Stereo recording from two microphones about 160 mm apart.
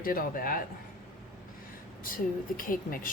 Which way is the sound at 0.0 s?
60° left (ahead or behind).